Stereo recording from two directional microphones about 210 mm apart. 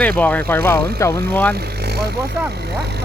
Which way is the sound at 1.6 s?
50° right (ahead or behind).